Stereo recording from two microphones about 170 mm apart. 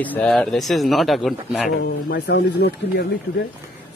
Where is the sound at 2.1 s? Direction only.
65° left (ahead or behind).